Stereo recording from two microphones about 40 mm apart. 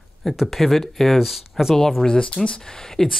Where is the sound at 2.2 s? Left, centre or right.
Left.